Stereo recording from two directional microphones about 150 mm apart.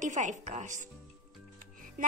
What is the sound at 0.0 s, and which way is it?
Speech, 55° right (ahead or behind).